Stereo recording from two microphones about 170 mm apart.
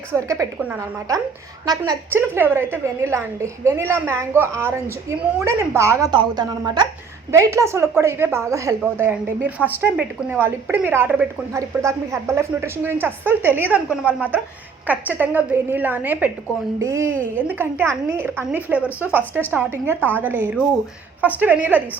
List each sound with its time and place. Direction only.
0.1 s a woman's voice: 15° right (ahead or behind)